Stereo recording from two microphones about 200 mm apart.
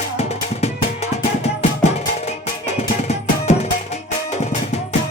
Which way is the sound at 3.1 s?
35° left (ahead or behind).